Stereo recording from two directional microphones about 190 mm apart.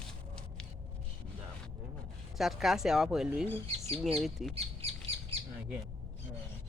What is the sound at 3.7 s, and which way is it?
Speech, 30° right (ahead or behind).